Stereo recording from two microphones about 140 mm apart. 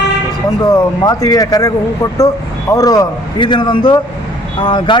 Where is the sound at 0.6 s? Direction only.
25° left (ahead or behind).